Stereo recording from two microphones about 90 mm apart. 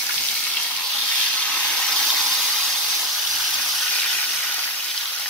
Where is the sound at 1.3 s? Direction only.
10° left (ahead or behind).